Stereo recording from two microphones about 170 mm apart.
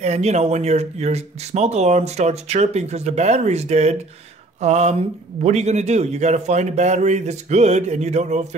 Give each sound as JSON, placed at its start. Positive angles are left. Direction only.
{"t": 0.0, "sound": "a man's voice", "side_deg": -40}